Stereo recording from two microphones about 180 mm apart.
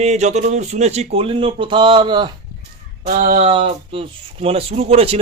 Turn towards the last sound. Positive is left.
turn(degrees=-35)  # may be behind; listen again after turning